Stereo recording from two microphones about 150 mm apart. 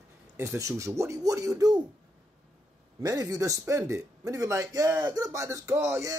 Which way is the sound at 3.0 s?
25° right (ahead or behind).